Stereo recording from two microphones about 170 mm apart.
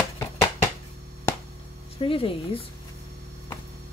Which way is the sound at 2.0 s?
30° left (ahead or behind).